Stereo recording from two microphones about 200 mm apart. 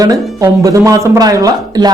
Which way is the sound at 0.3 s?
15° right (ahead or behind).